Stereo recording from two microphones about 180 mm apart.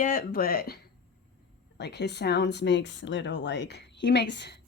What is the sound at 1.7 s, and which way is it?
Speech, 70° left (ahead or behind).